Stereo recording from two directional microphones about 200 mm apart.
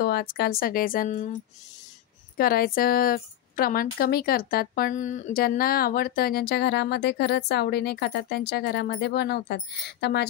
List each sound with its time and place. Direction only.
0.0 s a woman's voice: 50° left (ahead or behind)
2.3 s a woman's voice: 50° left (ahead or behind)